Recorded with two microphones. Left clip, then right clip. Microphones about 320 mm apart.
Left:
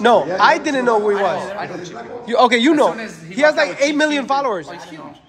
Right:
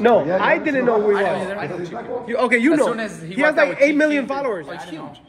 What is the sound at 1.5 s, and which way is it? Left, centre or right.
Speech, left.